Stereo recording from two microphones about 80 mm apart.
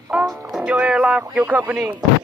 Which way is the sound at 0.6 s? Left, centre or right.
Centre.